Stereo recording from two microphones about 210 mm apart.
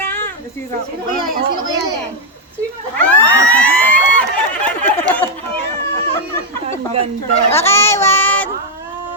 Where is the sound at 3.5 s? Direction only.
5° left (ahead or behind).